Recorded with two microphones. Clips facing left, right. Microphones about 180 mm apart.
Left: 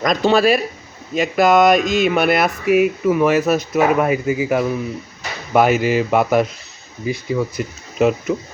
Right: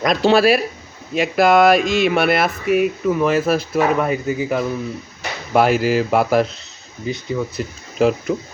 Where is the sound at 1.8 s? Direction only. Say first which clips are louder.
Even; 40° left (ahead or behind).